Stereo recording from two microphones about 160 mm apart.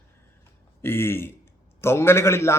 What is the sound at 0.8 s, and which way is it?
Speech, 15° left (ahead or behind).